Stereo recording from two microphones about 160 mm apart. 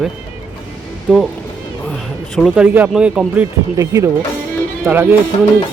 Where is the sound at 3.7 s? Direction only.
20° right (ahead or behind).